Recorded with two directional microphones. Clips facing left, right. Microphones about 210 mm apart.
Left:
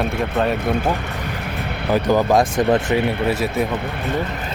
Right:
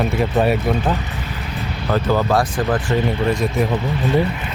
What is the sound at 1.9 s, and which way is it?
Speech, 15° left (ahead or behind).